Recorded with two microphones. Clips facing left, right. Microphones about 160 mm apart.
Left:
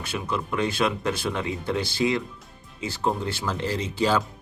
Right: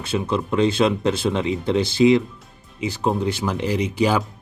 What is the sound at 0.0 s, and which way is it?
Speech, 25° right (ahead or behind).